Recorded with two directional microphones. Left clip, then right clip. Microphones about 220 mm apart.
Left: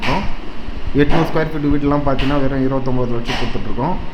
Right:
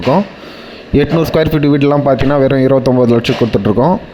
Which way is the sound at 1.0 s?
40° right (ahead or behind).